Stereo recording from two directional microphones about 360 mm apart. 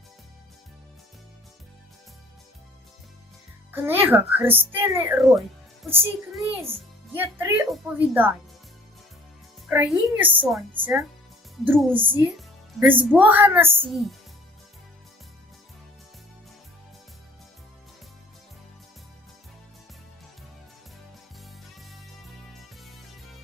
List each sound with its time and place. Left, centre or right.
3.7 s a child's voice: centre
9.6 s a child's voice: centre
11.6 s a child's voice: centre
21.4 s music: centre